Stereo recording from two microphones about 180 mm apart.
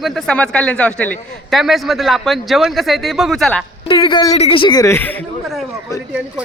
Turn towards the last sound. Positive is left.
turn(degrees=15)  # may be behind; listen again after turning